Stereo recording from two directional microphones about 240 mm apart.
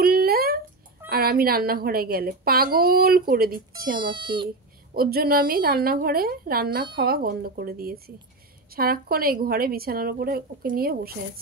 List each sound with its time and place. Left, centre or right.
0.0 s a sound: right
1.0 s a woman's voice: right
3.9 s speech: centre
4.9 s a woman's voice: right